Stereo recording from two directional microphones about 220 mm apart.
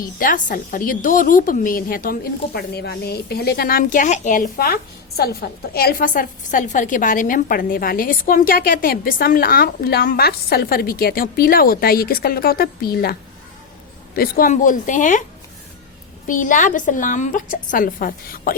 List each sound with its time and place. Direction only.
0.0 s a woman's voice: 40° left (ahead or behind)
14.2 s a woman's voice: 40° left (ahead or behind)
16.2 s a woman's voice: 35° left (ahead or behind)